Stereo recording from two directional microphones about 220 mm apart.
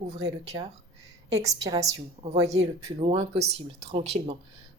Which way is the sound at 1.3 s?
15° right (ahead or behind).